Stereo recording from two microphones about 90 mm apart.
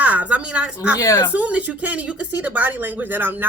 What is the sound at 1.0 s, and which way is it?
Speech, 40° left (ahead or behind).